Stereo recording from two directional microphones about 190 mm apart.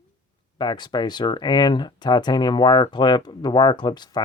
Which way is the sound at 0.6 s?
25° left (ahead or behind).